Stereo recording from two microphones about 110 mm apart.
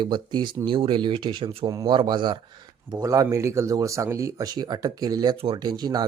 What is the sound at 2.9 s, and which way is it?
Speech, 30° right (ahead or behind).